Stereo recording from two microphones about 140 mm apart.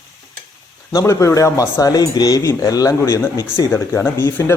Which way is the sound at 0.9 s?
25° left (ahead or behind).